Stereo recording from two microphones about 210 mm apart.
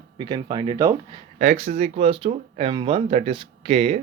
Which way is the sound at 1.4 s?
35° right (ahead or behind).